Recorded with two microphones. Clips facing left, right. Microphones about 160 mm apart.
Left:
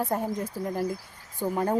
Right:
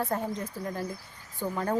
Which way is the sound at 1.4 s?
15° left (ahead or behind).